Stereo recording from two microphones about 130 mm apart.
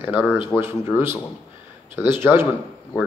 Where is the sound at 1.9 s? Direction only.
15° right (ahead or behind).